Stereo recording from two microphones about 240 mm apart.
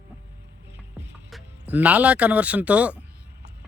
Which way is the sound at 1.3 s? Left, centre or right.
Centre.